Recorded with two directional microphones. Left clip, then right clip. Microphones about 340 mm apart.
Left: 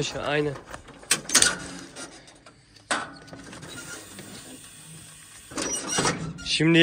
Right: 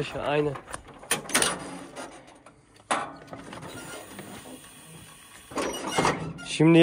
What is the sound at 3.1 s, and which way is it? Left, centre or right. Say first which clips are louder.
Music: right 2 dB; right.